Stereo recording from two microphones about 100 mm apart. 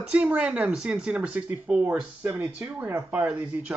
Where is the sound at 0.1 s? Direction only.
10° right (ahead or behind).